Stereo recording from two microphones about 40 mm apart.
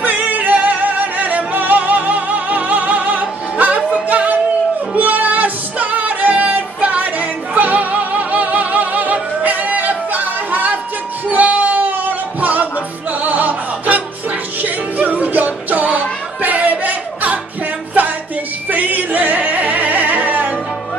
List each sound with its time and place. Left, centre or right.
0.0 s music: right
18.7 s singing: right